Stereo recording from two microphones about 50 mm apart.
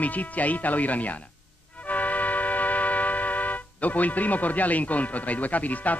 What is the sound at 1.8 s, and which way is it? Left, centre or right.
Music, left.